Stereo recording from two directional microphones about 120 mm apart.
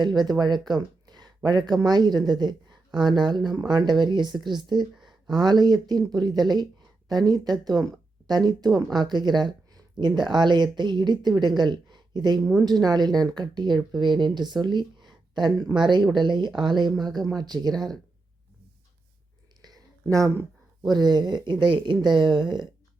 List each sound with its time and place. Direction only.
0.0 s a woman's voice: 35° right (ahead or behind)
4.9 s a sound: centre (ahead or behind)
5.3 s a woman's voice: 35° right (ahead or behind)
8.9 s a woman's voice: 35° right (ahead or behind)
19.6 s a sound: 30° right (ahead or behind)
20.9 s a woman's voice: 35° right (ahead or behind)